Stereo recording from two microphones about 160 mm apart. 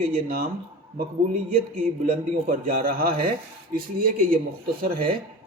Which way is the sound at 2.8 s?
65° right (ahead or behind).